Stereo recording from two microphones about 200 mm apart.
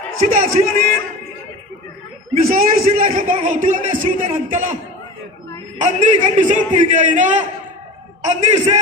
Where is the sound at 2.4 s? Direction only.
45° right (ahead or behind).